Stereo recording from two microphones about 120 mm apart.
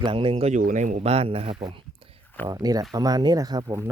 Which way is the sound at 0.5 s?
90° right.